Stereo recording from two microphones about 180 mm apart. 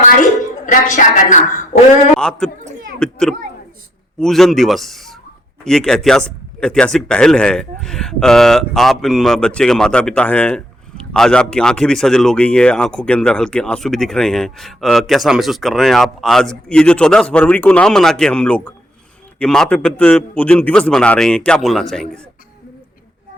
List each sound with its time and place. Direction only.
0.6 s a woman's voice: 45° left (ahead or behind)
2.1 s speech: 5° left (ahead or behind)